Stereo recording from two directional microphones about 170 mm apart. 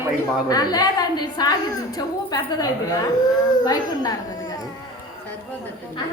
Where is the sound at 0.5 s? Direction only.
25° left (ahead or behind).